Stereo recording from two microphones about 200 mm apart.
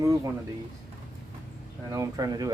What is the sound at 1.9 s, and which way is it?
Speech, 15° right (ahead or behind).